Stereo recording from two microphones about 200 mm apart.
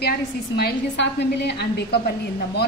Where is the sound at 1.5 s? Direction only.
55° left (ahead or behind).